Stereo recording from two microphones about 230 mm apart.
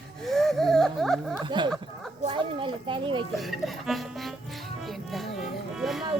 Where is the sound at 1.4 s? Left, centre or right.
Centre.